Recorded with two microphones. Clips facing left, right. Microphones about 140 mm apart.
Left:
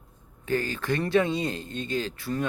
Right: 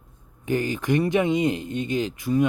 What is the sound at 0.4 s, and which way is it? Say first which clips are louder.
Speech: right 3 dB; 15° right (ahead or behind).